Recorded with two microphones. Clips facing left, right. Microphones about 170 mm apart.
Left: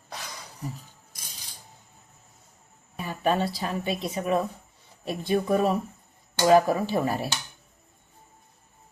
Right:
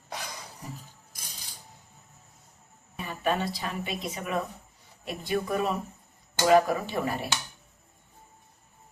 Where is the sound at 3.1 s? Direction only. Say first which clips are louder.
Left 3 dB; 35° left (ahead or behind).